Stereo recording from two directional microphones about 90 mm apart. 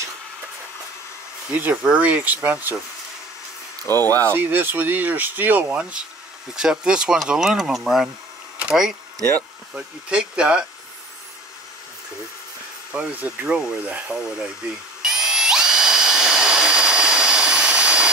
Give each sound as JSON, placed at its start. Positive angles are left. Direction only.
{"t": 1.5, "sound": "speech", "side_deg": -15}
{"t": 3.8, "sound": "speech", "side_deg": 25}
{"t": 4.3, "sound": "speech", "side_deg": -25}
{"t": 8.5, "sound": "bee", "side_deg": -10}
{"t": 9.8, "sound": "speech", "side_deg": -10}
{"t": 12.9, "sound": "speech", "side_deg": -15}
{"t": 15.0, "sound": "drill", "side_deg": -5}